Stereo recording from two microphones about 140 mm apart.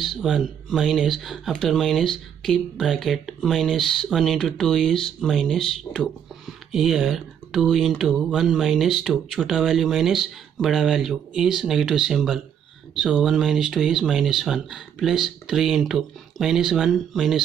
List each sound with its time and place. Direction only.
0.0 s speech: centre (ahead or behind)